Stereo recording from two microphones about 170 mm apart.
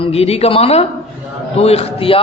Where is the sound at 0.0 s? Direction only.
35° left (ahead or behind).